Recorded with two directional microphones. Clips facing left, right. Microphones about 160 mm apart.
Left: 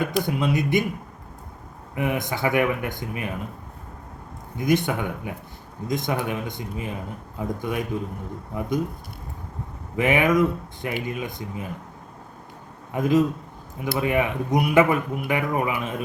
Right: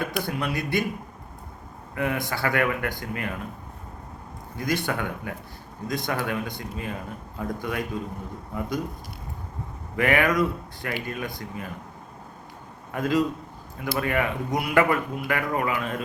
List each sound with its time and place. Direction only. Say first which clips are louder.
0.0 s speech: left 4 dB; 20° left (ahead or behind)
2.0 s speech: left 2 dB; 20° left (ahead or behind)
4.5 s speech: left 5 dB; 20° left (ahead or behind)
9.9 s speech: left 2 dB; 20° left (ahead or behind)
12.9 s speech: left 3 dB; 20° left (ahead or behind)